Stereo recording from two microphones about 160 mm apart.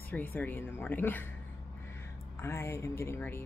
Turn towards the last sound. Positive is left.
turn(degrees=15)  # may be behind; listen again after turning